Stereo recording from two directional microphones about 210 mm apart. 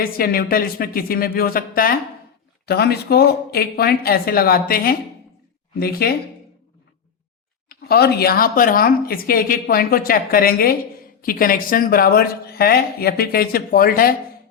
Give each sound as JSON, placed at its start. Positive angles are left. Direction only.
{"t": 0.0, "sound": "a woman's voice", "side_deg": 45}
{"t": 7.7, "sound": "a woman's voice", "side_deg": 50}